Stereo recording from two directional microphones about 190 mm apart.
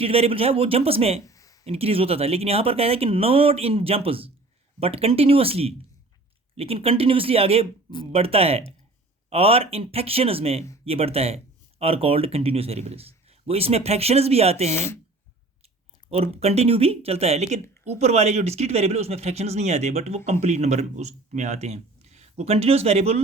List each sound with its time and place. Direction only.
0.0 s speech: 30° right (ahead or behind)
1.2 s a sound: 15° left (ahead or behind)
1.6 s speech: 30° right (ahead or behind)
16.0 s speech: 35° right (ahead or behind)